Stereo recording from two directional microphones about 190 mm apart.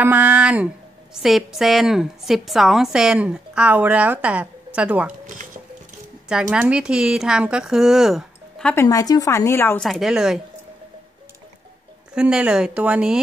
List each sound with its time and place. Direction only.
0.0 s a woman's voice: 10° right (ahead or behind)
6.5 s a woman's voice: 5° right (ahead or behind)
8.7 s speech: 20° left (ahead or behind)
9.8 s a woman's voice: centre (ahead or behind)
12.1 s a woman's voice: 5° right (ahead or behind)